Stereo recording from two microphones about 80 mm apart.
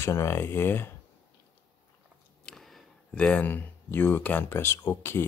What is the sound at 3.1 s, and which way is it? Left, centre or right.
Speech, centre.